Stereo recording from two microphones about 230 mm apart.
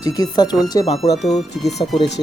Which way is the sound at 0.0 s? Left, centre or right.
Centre.